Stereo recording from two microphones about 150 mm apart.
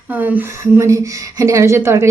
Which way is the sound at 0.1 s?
10° right (ahead or behind).